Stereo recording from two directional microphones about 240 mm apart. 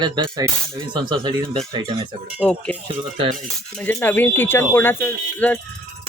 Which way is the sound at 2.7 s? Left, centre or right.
Centre.